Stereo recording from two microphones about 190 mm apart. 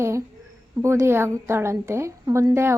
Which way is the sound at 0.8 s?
15° right (ahead or behind).